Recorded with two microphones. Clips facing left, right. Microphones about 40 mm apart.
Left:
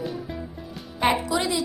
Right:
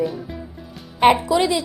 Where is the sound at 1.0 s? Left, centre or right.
Right.